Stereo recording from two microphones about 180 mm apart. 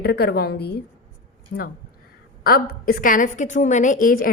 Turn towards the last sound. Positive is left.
turn(degrees=50)  # may be behind; listen again after turning